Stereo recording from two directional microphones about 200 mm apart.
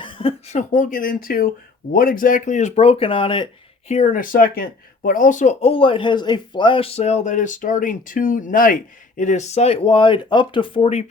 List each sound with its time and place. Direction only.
0.0 s speech: 25° left (ahead or behind)